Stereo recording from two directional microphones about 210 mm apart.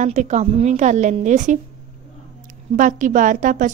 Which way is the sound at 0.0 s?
35° right (ahead or behind).